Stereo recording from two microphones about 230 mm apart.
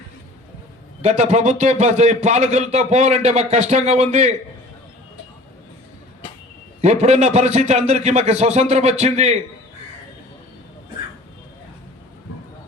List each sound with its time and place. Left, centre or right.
1.0 s a man's voice: right
6.8 s a man's voice: right